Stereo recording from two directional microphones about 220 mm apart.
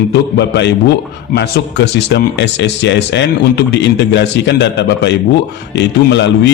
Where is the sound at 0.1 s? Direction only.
50° left (ahead or behind).